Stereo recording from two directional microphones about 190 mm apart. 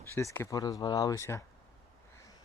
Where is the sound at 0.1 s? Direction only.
15° left (ahead or behind).